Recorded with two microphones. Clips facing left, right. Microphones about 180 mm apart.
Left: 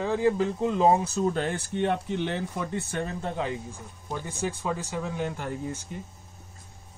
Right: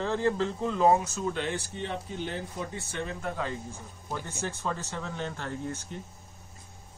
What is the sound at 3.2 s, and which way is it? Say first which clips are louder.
Speech: left 3 dB; 20° left (ahead or behind).